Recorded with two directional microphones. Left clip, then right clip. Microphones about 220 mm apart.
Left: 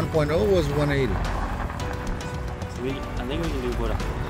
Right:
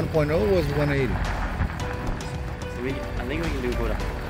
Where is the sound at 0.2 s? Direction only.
10° right (ahead or behind).